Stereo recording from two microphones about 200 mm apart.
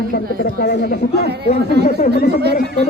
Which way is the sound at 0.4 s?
50° left (ahead or behind).